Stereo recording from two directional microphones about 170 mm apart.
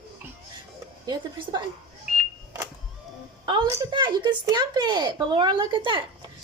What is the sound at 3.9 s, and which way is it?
Speech, 25° right (ahead or behind).